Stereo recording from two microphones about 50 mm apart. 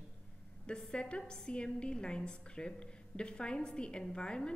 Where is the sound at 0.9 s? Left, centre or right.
Left.